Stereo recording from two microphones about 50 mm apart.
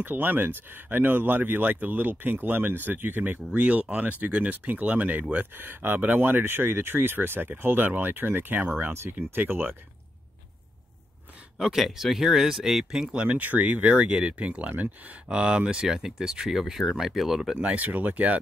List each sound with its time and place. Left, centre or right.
0.0 s speech: right
4.2 s speech: right
8.9 s speech: right
9.4 s speech: right
11.5 s speech: centre
13.3 s speech: right; by 17.6 s centre
17.6 s speech: right